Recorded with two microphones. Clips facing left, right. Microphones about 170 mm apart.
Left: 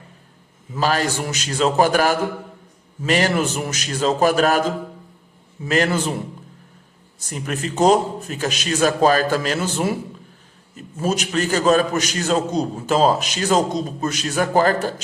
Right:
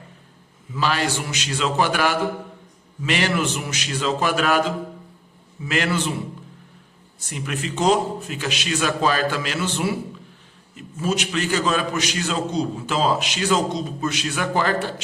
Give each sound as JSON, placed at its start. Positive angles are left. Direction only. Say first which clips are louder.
{"t": 0.7, "sound": "a man's voice", "louder": "left 2 dB", "side_deg": 40}
{"t": 7.2, "sound": "a man's voice", "louder": "left 2 dB", "side_deg": 40}